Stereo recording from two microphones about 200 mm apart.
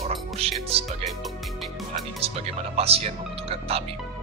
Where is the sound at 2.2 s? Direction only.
30° right (ahead or behind).